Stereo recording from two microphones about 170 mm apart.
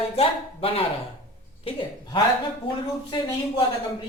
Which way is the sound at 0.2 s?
35° left (ahead or behind).